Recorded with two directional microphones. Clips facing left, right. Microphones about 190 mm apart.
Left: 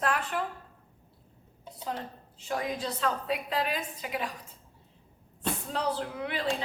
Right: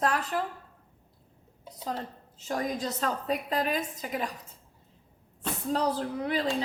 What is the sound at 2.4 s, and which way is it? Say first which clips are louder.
A woman's voice: right 2 dB; 40° right (ahead or behind).